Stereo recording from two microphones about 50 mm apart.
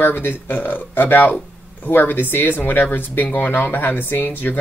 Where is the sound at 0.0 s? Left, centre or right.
Left.